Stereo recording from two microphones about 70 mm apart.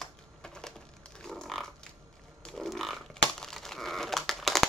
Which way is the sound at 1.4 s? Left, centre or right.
Centre.